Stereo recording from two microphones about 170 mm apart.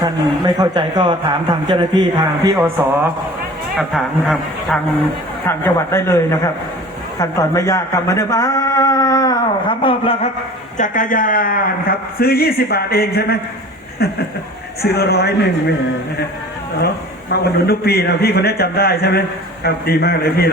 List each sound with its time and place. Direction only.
0.0 s a man's voice: 20° right (ahead or behind)
3.8 s a man's voice: centre (ahead or behind)
5.5 s a man's voice: 15° left (ahead or behind); by 10.2 s 35° left (ahead or behind)
10.8 s a man's voice: 50° left (ahead or behind); by 15.4 s 70° left (ahead or behind)
17.7 s a man's voice: 65° left (ahead or behind)